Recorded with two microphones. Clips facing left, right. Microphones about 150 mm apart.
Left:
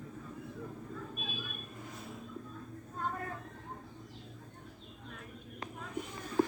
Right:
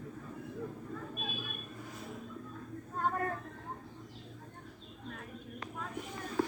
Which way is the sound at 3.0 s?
55° right (ahead or behind).